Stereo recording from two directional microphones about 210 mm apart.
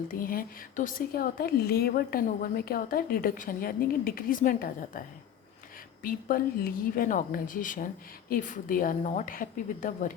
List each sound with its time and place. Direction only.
0.1 s a woman's voice: 40° left (ahead or behind)